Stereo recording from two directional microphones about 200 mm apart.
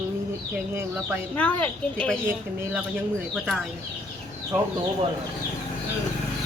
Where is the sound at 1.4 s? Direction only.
10° left (ahead or behind).